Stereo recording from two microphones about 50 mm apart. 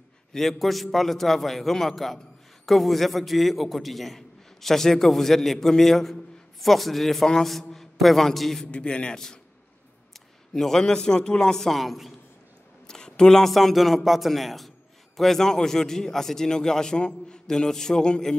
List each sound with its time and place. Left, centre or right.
0.3 s a man's voice: centre
8.7 s a man's voice: left
10.1 s a man's voice: centre
12.8 s a man's voice: centre